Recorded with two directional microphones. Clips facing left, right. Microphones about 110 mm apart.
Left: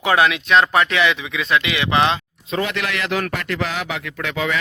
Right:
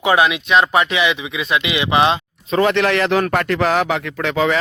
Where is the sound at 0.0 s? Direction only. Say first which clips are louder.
Right 2 dB; 10° right (ahead or behind).